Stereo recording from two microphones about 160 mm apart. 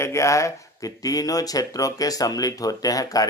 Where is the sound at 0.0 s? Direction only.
20° left (ahead or behind).